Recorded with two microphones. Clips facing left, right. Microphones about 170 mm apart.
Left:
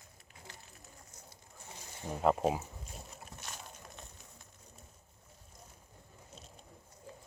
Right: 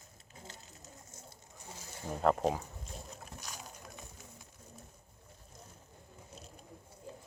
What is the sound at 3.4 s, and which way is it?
Boat, centre (ahead or behind).